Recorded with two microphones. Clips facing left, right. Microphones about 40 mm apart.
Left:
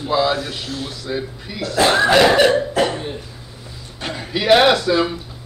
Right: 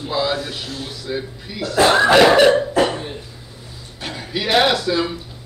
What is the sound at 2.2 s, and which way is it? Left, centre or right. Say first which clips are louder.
Cough: right 2 dB; centre.